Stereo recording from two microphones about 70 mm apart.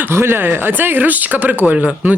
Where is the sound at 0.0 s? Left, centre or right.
Right.